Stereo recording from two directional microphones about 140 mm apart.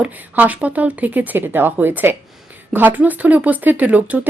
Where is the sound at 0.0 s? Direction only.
10° right (ahead or behind).